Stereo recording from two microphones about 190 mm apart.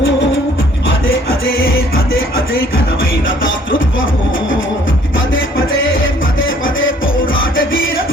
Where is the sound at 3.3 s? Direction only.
90° left.